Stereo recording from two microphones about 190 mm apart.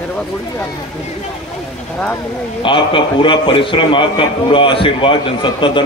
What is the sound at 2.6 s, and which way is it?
A man's voice, 25° left (ahead or behind).